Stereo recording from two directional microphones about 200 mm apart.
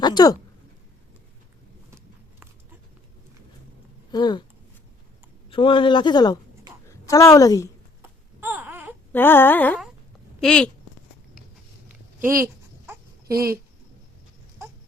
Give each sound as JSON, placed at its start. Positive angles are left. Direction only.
{"t": 0.0, "sound": "a man's voice", "side_deg": 20}
{"t": 4.1, "sound": "a man's voice", "side_deg": 20}
{"t": 5.5, "sound": "a man's voice", "side_deg": 25}
{"t": 7.0, "sound": "humming", "side_deg": 15}
{"t": 8.4, "sound": "baby cry", "side_deg": -10}
{"t": 9.1, "sound": "humming", "side_deg": 10}
{"t": 10.4, "sound": "speech", "side_deg": 5}
{"t": 12.9, "sound": "a sound", "side_deg": -15}